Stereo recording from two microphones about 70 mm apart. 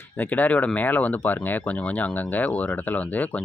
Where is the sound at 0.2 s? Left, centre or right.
Left.